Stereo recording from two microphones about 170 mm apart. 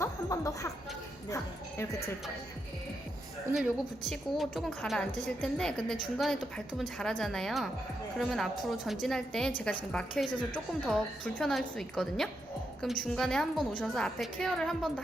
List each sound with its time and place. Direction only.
0.0 s music: 20° left (ahead or behind)
3.5 s a woman's voice: centre (ahead or behind)